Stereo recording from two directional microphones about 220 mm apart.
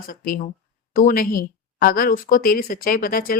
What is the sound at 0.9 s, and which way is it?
A woman's voice, 40° left (ahead or behind).